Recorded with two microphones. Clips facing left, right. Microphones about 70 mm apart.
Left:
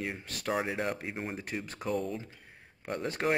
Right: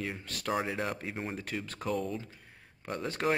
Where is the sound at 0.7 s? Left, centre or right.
Centre.